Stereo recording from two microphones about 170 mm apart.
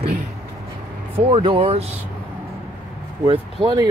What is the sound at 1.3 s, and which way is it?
Speech, 35° right (ahead or behind).